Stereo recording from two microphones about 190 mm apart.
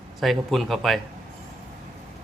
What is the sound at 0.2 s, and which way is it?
Speech, centre (ahead or behind).